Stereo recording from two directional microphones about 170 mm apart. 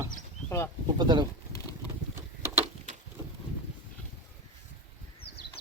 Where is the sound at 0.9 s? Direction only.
25° right (ahead or behind).